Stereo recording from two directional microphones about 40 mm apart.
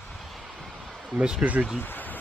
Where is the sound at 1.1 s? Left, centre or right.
Centre.